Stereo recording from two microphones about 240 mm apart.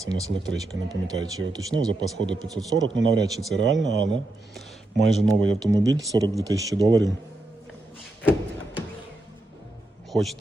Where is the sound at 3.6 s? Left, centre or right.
Right.